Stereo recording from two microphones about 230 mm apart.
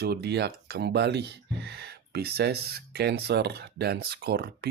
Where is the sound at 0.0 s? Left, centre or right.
Right.